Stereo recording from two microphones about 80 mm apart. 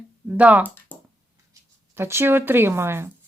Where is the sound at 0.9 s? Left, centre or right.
Left.